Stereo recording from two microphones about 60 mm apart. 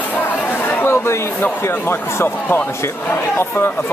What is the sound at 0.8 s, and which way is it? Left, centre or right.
A man's voice, left.